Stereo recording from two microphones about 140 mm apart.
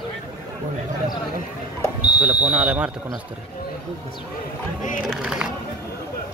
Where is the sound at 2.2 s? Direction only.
5° right (ahead or behind).